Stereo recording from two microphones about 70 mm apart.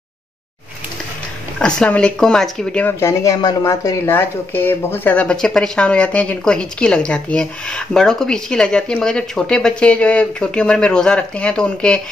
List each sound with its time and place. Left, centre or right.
1.9 s speech: centre
3.0 s speech: left
4.1 s speech: left
5.1 s speech: centre